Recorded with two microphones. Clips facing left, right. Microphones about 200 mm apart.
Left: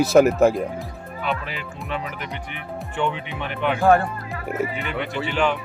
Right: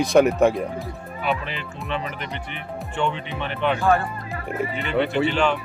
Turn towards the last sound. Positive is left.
turn(degrees=15)  # may be behind; listen again after turning